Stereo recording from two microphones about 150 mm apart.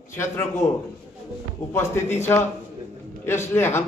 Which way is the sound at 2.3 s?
15° left (ahead or behind).